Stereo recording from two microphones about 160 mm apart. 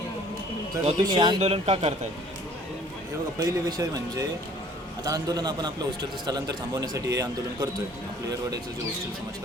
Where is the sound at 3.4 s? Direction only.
20° right (ahead or behind).